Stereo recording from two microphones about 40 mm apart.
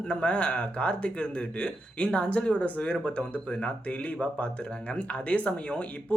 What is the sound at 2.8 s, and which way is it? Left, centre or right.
Speech, left.